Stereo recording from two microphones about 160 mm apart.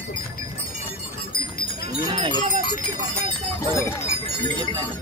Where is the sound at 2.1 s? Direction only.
30° right (ahead or behind).